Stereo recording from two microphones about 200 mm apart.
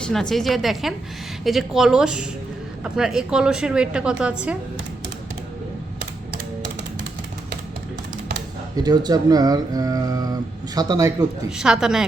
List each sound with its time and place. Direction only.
0.0 s a woman's voice: 5° left (ahead or behind)
8.7 s speech: 20° right (ahead or behind)
11.4 s a woman's voice: 5° right (ahead or behind)